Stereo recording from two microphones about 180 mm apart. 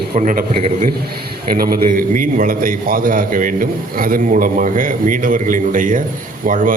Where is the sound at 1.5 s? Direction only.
55° right (ahead or behind).